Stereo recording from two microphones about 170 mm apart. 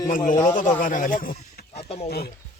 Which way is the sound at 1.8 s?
35° left (ahead or behind).